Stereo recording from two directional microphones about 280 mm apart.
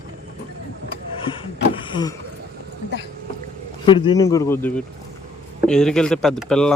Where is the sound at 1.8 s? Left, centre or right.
Centre.